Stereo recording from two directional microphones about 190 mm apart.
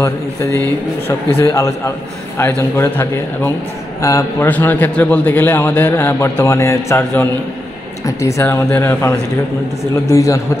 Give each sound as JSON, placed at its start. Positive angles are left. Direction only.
{"t": 1.0, "sound": "a man's voice", "side_deg": 15}